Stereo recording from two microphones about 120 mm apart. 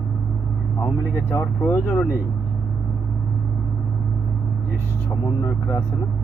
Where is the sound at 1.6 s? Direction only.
20° left (ahead or behind).